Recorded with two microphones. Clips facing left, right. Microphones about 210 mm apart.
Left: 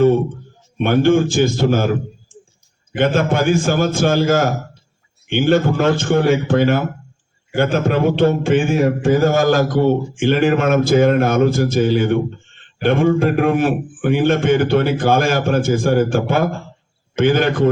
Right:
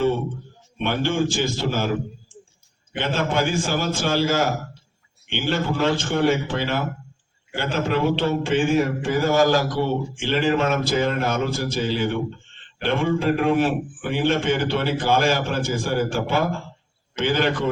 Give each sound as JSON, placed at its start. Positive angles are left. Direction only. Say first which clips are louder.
{"t": 0.8, "sound": "mantra", "louder": "left 9 dB", "side_deg": 50}
{"t": 3.0, "sound": "mantra", "louder": "left 7 dB", "side_deg": 50}